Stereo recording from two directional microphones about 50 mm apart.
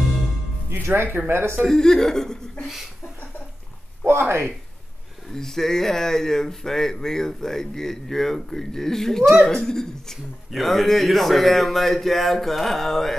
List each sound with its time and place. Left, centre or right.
0.8 s speech: right
1.7 s speech: centre
2.6 s a man's voice: centre
4.0 s a sound: right
5.3 s a man's voice: centre